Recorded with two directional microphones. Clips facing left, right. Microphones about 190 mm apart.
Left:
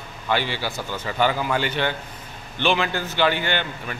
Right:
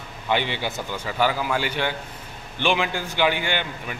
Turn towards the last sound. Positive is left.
turn(degrees=-10)  # may be behind; listen again after turning